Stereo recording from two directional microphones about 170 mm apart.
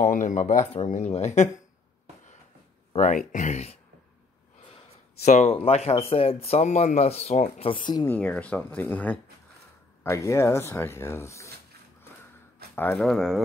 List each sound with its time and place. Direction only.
0.0 s speech: 50° left (ahead or behind)
3.0 s speech: 45° left (ahead or behind)
7.8 s speech: 25° left (ahead or behind)
8.1 s speech: 10° left (ahead or behind)
12.7 s speech: 10° left (ahead or behind)